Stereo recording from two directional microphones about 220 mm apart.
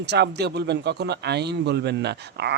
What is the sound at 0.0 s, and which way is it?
Speech, 50° right (ahead or behind).